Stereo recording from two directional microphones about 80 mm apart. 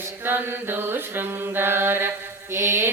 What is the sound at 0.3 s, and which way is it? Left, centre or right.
Mantra, right.